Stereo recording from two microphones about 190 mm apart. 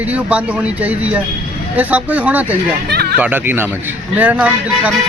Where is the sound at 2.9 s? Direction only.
60° right (ahead or behind).